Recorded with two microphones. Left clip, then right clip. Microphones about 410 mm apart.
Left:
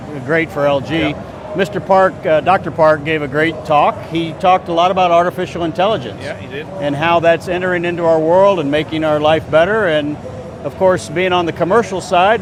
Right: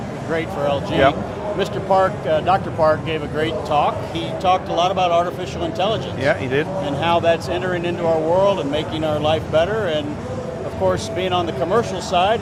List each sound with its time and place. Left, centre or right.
0.3 s speech: left